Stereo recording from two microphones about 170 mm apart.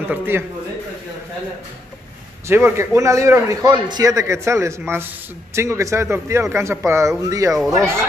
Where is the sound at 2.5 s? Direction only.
15° right (ahead or behind).